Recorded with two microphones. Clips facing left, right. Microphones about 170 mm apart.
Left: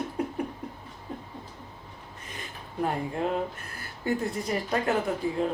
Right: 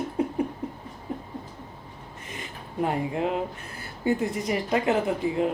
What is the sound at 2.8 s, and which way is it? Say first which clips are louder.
Speech: right 2 dB; 20° right (ahead or behind).